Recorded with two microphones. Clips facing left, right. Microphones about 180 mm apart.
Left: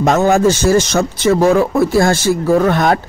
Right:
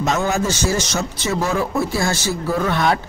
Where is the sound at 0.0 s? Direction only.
55° left (ahead or behind).